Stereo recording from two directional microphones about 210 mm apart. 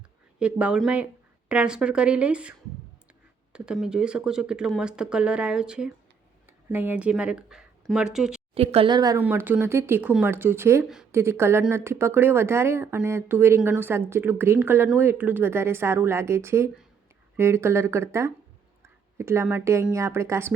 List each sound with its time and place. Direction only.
0.3 s speech: 5° right (ahead or behind)
8.5 s a woman's voice: 30° right (ahead or behind); by 20.5 s 15° right (ahead or behind)